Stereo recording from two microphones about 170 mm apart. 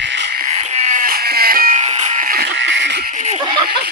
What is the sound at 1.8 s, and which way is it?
Music, 40° right (ahead or behind).